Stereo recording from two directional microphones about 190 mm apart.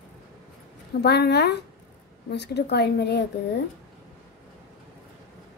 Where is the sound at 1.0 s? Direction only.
60° left (ahead or behind).